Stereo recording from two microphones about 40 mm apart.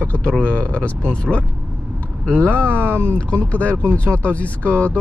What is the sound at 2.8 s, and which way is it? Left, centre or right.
Speech, right.